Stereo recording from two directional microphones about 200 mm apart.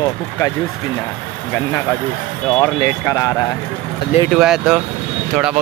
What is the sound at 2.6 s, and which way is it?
Speech, 15° left (ahead or behind).